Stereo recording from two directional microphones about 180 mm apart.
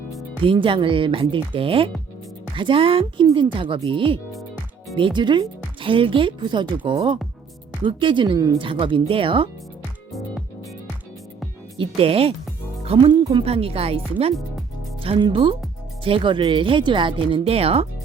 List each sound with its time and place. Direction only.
0.4 s speech: 30° right (ahead or behind)
10.1 s music: centre (ahead or behind)
11.9 s speech: 30° right (ahead or behind)